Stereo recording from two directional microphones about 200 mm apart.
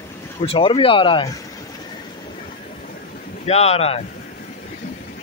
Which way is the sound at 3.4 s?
30° left (ahead or behind).